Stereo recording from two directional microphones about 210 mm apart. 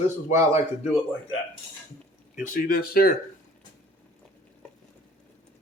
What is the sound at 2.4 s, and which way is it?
Speech, 40° left (ahead or behind).